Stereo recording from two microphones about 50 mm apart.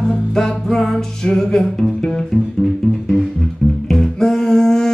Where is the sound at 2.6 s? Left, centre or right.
Centre.